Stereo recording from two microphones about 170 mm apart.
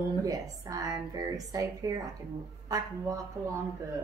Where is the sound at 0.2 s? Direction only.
20° right (ahead or behind).